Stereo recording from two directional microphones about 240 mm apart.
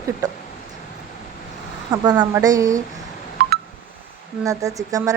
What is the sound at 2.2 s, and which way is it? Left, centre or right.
Speech, centre.